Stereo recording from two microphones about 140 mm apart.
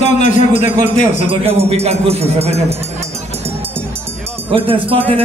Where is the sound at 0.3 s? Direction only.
60° left (ahead or behind).